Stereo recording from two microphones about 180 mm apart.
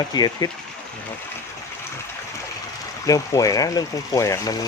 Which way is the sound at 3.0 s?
20° left (ahead or behind).